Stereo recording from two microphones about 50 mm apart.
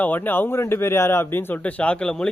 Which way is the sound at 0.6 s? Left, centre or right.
Left.